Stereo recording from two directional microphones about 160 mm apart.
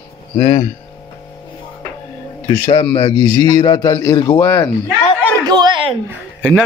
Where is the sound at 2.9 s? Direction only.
35° left (ahead or behind); by 4.7 s 15° left (ahead or behind).